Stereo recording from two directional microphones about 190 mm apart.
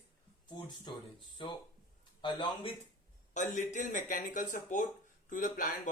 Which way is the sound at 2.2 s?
25° left (ahead or behind).